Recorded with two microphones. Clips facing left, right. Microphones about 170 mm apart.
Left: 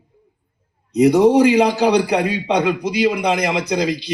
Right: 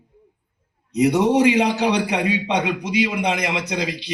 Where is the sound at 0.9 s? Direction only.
35° left (ahead or behind).